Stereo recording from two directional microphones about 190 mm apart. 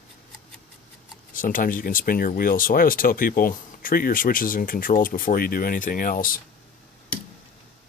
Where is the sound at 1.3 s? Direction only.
45° left (ahead or behind).